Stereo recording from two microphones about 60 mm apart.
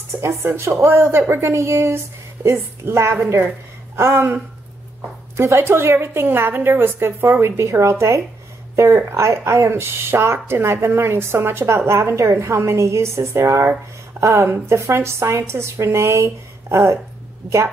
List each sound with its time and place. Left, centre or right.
0.2 s a woman's voice: right
5.4 s a woman's voice: right